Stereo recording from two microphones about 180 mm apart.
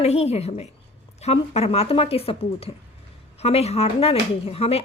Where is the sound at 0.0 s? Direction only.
35° left (ahead or behind).